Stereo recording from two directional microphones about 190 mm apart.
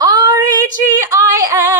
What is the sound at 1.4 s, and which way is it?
Music, 15° right (ahead or behind).